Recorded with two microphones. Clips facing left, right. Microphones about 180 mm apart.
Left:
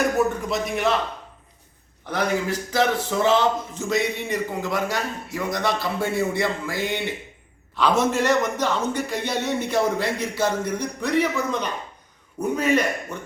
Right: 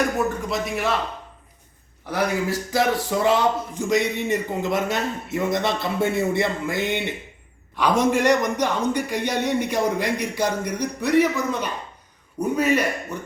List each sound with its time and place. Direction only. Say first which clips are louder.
0.3 s a man's voice: left 1 dB; centre (ahead or behind)
2.0 s a man's voice: right 1 dB; 10° right (ahead or behind)